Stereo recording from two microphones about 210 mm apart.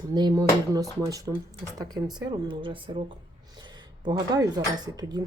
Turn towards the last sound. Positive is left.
turn(degrees=-20)  # may be behind; listen again after turning